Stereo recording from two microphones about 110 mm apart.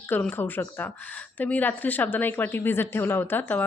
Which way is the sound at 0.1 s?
20° left (ahead or behind).